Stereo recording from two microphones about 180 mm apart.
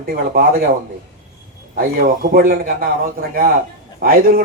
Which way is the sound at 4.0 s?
55° right (ahead or behind).